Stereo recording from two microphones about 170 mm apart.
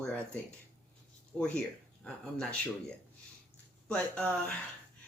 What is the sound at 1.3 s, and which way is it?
Speech, 5° left (ahead or behind).